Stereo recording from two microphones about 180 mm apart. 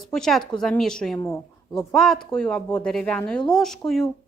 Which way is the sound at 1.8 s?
Centre (ahead or behind).